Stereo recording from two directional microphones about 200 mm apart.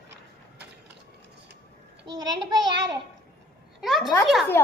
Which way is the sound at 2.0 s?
20° right (ahead or behind).